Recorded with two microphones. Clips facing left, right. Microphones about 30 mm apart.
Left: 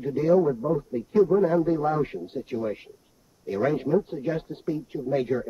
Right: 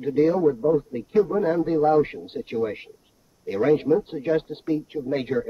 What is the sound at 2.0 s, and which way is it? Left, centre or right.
Speech, right.